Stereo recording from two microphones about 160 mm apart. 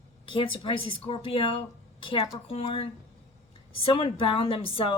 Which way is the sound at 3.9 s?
35° left (ahead or behind).